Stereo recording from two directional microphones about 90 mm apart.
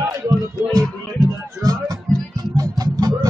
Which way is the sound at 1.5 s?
45° right (ahead or behind).